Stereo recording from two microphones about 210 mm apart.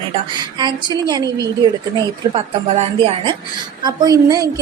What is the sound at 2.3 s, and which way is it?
A woman's voice, 30° right (ahead or behind).